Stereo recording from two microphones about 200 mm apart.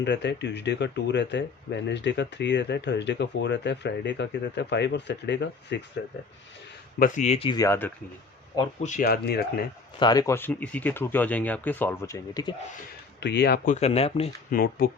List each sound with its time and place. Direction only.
0.0 s speech: 60° left (ahead or behind)
7.0 s speech: 40° left (ahead or behind)
7.6 s speech: 10° left (ahead or behind)
8.8 s speech: 40° left (ahead or behind)
10.0 s speech: 20° left (ahead or behind)
13.1 s speech: 60° left (ahead or behind)
13.7 s speech: 35° left (ahead or behind)
14.5 s speech: 45° left (ahead or behind)